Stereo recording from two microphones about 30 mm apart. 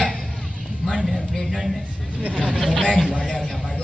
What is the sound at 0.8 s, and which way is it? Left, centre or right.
Speech, centre.